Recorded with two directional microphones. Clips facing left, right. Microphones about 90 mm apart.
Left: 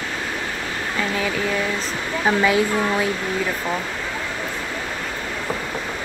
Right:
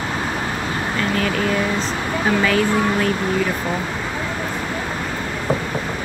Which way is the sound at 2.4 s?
15° left (ahead or behind).